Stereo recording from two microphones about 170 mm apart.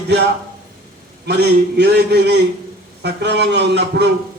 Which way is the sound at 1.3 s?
75° right (ahead or behind).